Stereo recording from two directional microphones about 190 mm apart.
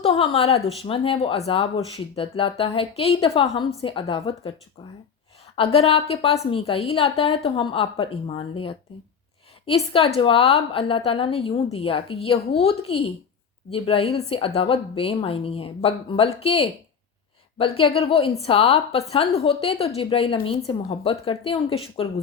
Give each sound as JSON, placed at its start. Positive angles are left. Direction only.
{"t": 0.0, "sound": "a woman's voice", "side_deg": 30}
{"t": 5.5, "sound": "a woman's voice", "side_deg": 30}